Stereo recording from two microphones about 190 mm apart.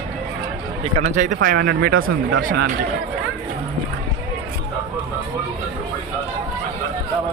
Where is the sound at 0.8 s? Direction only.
35° right (ahead or behind); by 2.7 s 60° right (ahead or behind).